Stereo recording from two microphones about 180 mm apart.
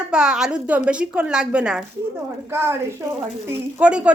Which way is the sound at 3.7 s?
5° right (ahead or behind).